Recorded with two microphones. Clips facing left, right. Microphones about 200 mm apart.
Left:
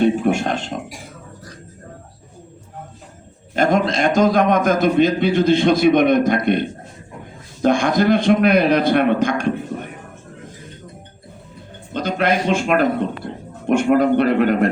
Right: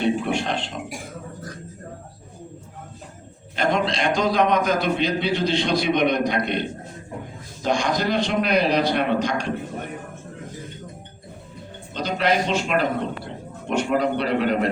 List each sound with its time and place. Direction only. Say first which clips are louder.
0.0 s a man's voice: left 6 dB; 45° left (ahead or behind)
3.5 s a man's voice: left 5 dB; 45° left (ahead or behind)
7.6 s a man's voice: left 7 dB; 50° left (ahead or behind)
11.9 s a man's voice: left 3 dB; 55° left (ahead or behind)